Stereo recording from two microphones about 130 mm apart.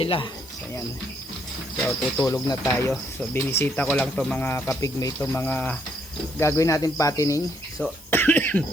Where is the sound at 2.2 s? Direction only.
25° left (ahead or behind).